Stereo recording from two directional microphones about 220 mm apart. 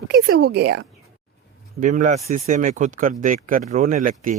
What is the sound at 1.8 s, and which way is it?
Speech, 35° right (ahead or behind).